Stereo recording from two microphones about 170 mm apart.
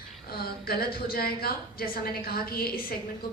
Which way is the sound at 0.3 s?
65° left (ahead or behind).